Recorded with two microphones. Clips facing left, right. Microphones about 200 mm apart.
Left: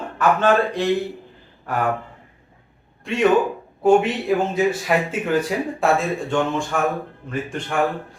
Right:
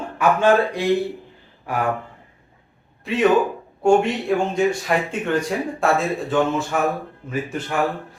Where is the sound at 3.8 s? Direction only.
Centre (ahead or behind).